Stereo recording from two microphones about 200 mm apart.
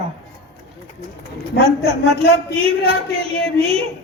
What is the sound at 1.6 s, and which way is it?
A man's voice, 30° right (ahead or behind).